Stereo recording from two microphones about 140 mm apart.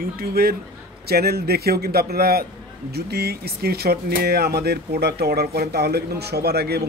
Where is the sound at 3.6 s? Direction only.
90° right.